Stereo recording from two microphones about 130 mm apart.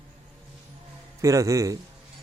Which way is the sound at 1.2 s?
25° right (ahead or behind).